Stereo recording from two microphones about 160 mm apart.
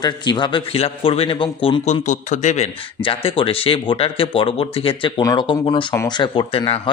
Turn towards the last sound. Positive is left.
turn(degrees=35)  # may be behind; listen again after turning